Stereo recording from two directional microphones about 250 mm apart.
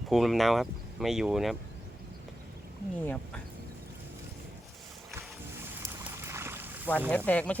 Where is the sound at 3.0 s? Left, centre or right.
Centre.